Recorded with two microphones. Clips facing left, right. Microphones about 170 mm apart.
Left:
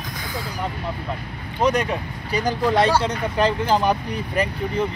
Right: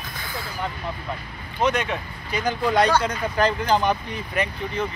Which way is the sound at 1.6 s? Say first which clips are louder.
Left 3 dB; 35° left (ahead or behind).